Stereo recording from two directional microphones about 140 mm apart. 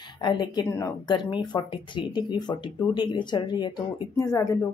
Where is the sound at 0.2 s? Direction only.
30° left (ahead or behind).